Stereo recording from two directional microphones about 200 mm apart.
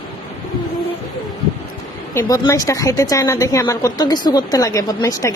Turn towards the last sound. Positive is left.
turn(degrees=15)  # may be behind; listen again after turning